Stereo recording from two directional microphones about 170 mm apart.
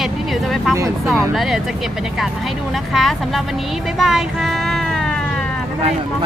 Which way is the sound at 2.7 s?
Centre (ahead or behind).